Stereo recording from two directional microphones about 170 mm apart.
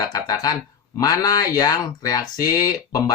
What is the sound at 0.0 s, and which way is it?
Speech, 20° left (ahead or behind).